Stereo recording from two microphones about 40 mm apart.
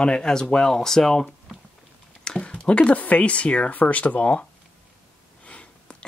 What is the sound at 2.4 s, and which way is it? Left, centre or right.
Speech, left.